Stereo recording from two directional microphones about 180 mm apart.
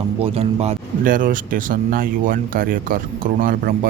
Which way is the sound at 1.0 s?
50° right (ahead or behind).